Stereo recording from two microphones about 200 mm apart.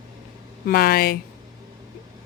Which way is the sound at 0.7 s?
50° left (ahead or behind).